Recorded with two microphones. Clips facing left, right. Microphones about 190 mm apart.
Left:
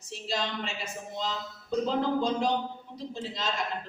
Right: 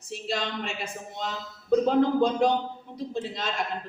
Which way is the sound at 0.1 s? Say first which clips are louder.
Right 2 dB; 55° right (ahead or behind).